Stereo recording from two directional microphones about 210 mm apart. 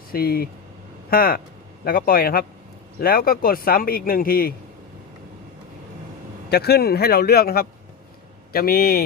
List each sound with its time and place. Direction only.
0.1 s speech: 45° left (ahead or behind)
6.5 s speech: 50° left (ahead or behind)